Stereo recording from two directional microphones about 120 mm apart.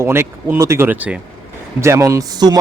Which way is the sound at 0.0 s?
20° right (ahead or behind).